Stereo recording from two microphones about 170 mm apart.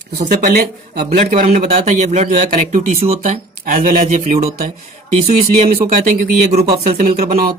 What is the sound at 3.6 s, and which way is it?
Speech, 55° right (ahead or behind).